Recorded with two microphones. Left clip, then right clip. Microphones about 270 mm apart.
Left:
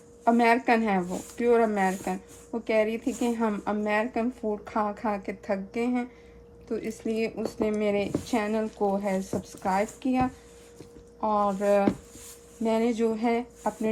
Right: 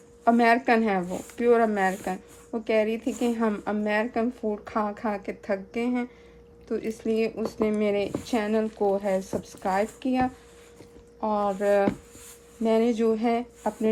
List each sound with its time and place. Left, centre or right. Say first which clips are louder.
0.3 s speech: right 1 dB; right